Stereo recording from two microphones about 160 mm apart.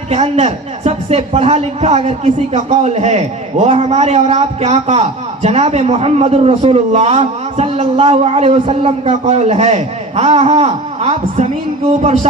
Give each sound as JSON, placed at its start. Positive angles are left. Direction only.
{"t": 0.1, "sound": "speech", "side_deg": -40}
{"t": 12.0, "sound": "music", "side_deg": -40}